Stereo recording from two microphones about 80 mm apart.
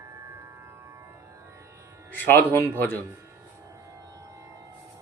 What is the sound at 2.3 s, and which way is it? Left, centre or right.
Speech, left.